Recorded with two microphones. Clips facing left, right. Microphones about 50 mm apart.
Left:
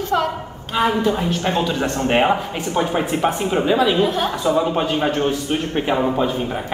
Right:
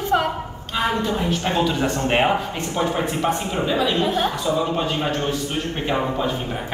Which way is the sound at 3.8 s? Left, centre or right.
Centre.